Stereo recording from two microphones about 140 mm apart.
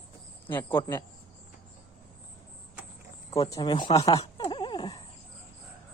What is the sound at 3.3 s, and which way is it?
Speech, 25° left (ahead or behind).